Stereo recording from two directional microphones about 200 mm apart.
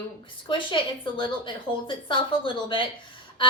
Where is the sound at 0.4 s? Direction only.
25° left (ahead or behind).